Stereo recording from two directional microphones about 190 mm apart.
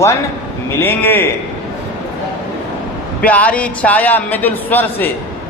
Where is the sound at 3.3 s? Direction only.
5° left (ahead or behind).